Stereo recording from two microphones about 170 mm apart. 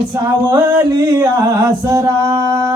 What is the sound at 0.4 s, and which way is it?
Music, 20° right (ahead or behind).